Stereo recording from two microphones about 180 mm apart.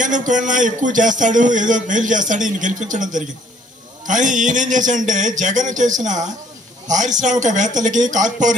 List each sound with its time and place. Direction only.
0.0 s a man's voice: 45° right (ahead or behind)